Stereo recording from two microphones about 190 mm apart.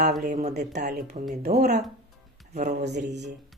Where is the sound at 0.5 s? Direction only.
60° right (ahead or behind).